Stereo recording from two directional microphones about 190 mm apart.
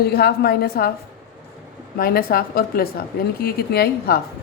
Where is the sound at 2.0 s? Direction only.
50° left (ahead or behind).